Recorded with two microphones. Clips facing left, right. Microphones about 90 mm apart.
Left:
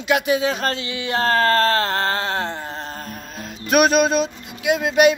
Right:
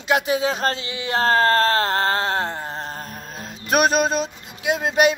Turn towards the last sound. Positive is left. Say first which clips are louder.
# left 3 dB
turn(degrees=-30)  # may be behind; listen again after turning